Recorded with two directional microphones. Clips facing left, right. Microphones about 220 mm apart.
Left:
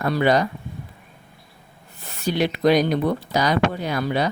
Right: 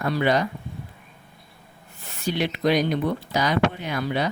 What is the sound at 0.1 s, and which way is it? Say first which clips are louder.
Speech: left 3 dB; 40° left (ahead or behind).